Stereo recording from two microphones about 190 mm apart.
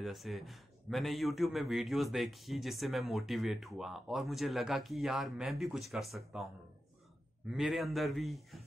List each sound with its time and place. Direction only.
0.0 s speech: centre (ahead or behind)
7.5 s speech: centre (ahead or behind)